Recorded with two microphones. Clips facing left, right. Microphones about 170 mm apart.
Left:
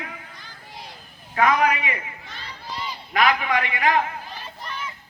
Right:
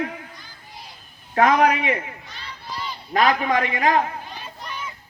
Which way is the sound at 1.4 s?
45° right (ahead or behind).